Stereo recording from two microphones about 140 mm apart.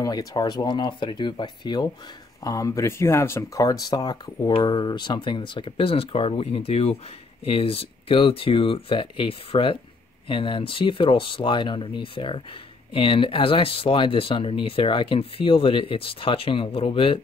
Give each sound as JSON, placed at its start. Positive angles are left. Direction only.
{"t": 0.0, "sound": "speech", "side_deg": 25}